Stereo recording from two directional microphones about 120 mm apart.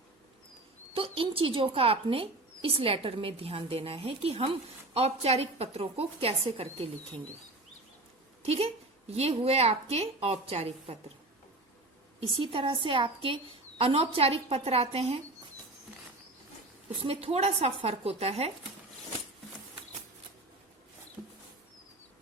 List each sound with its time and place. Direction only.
0.9 s a woman's voice: 50° right (ahead or behind)
8.4 s a woman's voice: 60° right (ahead or behind)
12.4 s a woman's voice: 50° right (ahead or behind)
17.0 s a woman's voice: 50° right (ahead or behind)